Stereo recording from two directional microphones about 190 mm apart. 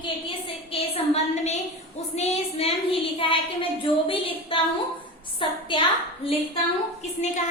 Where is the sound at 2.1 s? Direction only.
35° left (ahead or behind).